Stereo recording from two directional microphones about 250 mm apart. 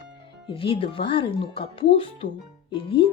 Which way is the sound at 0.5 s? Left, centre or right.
Left.